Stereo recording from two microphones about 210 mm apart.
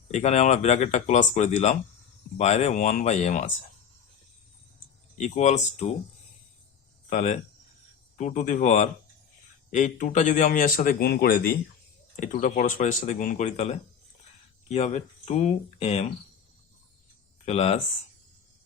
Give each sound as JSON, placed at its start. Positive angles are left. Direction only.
{"t": 0.1, "sound": "a man's voice", "side_deg": 35}
{"t": 5.1, "sound": "a man's voice", "side_deg": 35}
{"t": 7.1, "sound": "a man's voice", "side_deg": 35}
{"t": 17.4, "sound": "speech", "side_deg": 30}